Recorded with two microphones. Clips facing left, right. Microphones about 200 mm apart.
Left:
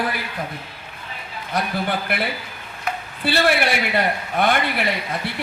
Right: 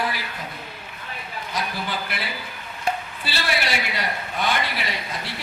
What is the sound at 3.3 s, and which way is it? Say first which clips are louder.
A woman's voice: left 8 dB; 55° left (ahead or behind).